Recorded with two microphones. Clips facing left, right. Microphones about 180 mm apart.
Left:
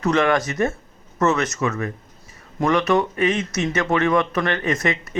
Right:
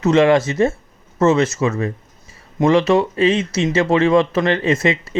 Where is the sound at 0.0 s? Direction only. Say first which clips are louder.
Right 6 dB; 25° right (ahead or behind).